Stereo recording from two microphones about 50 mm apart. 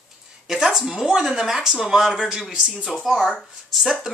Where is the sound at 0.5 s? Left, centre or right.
Centre.